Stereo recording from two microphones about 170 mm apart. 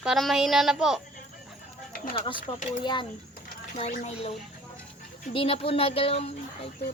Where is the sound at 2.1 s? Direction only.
30° left (ahead or behind).